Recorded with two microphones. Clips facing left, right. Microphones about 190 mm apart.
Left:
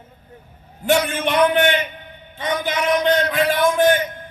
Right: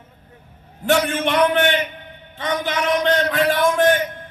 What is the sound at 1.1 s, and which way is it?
A man's voice, centre (ahead or behind).